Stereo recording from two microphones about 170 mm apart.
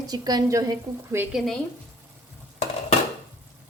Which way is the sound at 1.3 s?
Centre (ahead or behind).